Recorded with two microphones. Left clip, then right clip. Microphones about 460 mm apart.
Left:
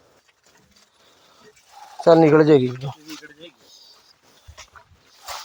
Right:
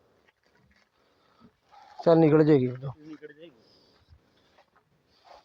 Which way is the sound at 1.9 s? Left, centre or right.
Right.